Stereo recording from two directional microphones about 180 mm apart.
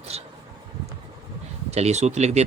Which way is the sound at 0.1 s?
35° right (ahead or behind).